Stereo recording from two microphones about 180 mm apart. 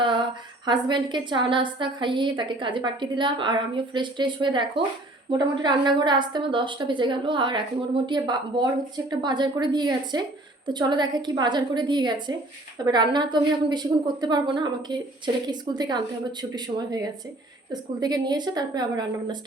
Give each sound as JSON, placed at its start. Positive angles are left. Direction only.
{"t": 0.0, "sound": "a woman's voice", "side_deg": -25}